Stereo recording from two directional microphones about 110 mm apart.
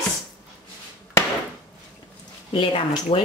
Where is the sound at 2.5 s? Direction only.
55° left (ahead or behind).